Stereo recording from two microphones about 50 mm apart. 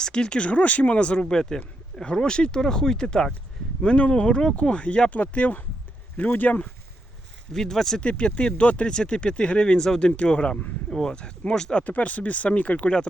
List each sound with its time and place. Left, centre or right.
0.0 s speech: centre; by 6.6 s left
7.5 s speech: centre
8.0 s speech: left
11.8 s speech: left